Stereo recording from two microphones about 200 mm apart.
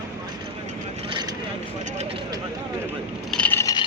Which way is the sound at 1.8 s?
35° right (ahead or behind).